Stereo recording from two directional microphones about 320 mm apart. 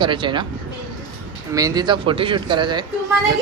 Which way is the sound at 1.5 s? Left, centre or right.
Centre.